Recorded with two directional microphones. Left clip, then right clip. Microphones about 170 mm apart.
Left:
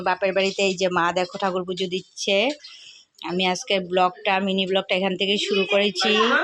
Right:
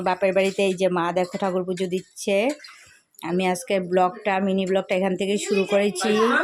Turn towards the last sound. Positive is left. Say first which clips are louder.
# left 1 dB
turn(degrees=-15)  # may be behind; listen again after turning